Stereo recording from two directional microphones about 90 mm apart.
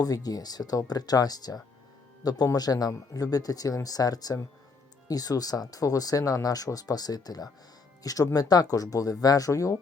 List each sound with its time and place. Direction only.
0.0 s speech: 45° left (ahead or behind)